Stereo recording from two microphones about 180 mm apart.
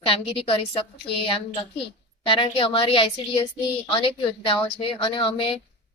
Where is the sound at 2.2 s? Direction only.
30° left (ahead or behind).